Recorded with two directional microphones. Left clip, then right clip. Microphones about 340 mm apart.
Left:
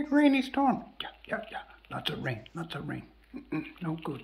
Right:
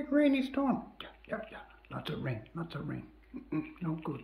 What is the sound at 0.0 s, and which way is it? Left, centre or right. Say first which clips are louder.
Speech: left 3 dB; centre.